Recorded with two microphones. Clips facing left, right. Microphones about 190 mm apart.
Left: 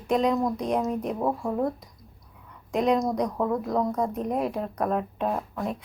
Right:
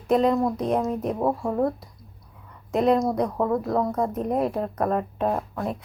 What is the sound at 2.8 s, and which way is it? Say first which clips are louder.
A woman's voice: right 3 dB; 5° right (ahead or behind).